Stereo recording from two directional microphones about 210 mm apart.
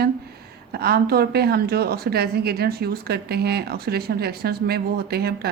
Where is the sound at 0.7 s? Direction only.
50° right (ahead or behind).